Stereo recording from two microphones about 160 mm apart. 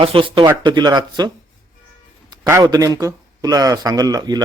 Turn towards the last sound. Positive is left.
turn(degrees=-25)  # may be behind; listen again after turning